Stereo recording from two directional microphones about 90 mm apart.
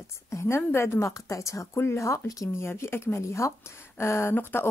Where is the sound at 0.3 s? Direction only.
30° left (ahead or behind).